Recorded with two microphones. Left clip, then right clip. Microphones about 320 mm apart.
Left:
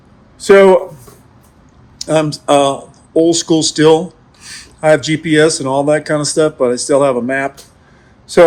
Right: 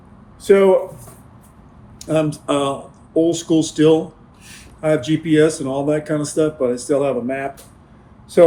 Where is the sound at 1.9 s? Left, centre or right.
Left.